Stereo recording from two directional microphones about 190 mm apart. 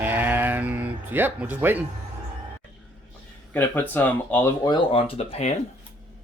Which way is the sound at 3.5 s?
10° left (ahead or behind).